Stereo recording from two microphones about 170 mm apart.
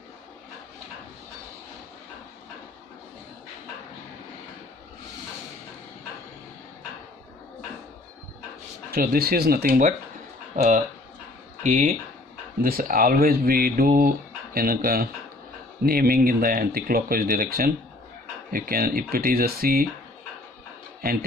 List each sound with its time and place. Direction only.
8.9 s speech: 65° right (ahead or behind)
21.0 s speech: 60° right (ahead or behind)